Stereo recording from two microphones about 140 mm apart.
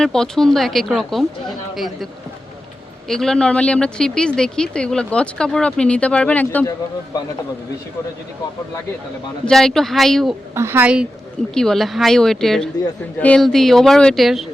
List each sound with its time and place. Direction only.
0.0 s speech: 5° left (ahead or behind)
3.1 s a woman's voice: 5° left (ahead or behind)
9.5 s speech: 5° left (ahead or behind)
10.5 s a woman's voice: 20° right (ahead or behind)
11.5 s speech: 5° left (ahead or behind)